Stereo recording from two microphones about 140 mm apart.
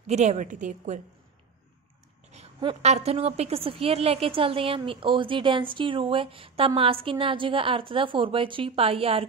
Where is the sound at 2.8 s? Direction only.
50° right (ahead or behind).